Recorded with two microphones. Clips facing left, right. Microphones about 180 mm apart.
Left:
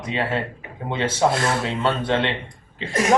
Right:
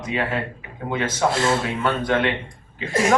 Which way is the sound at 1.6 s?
25° left (ahead or behind).